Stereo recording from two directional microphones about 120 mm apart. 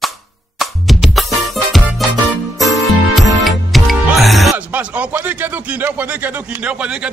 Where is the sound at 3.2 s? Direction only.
Centre (ahead or behind).